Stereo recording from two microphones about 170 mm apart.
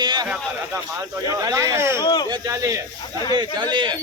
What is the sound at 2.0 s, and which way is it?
Speech, 25° left (ahead or behind).